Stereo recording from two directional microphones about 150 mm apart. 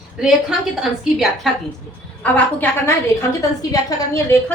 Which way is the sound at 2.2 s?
10° left (ahead or behind).